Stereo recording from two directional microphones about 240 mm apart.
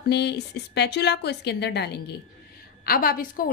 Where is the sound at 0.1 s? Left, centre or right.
Left.